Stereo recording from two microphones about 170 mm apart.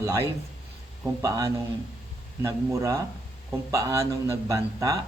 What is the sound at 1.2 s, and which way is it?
Speech, 20° right (ahead or behind).